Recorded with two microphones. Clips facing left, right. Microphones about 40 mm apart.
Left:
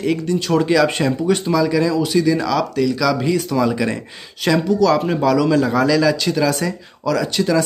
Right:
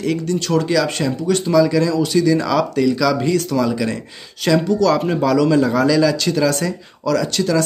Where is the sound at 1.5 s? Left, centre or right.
Centre.